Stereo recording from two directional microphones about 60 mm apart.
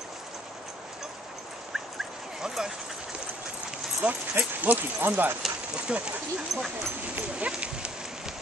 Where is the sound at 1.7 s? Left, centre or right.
Centre.